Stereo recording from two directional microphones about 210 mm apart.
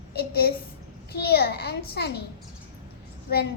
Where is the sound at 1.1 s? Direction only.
50° left (ahead or behind).